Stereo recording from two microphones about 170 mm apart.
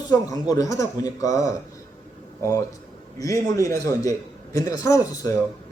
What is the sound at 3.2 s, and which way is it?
A man's voice, 20° left (ahead or behind).